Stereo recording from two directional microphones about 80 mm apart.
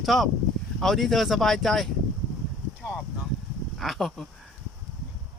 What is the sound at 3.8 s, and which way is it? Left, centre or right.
Speech, centre.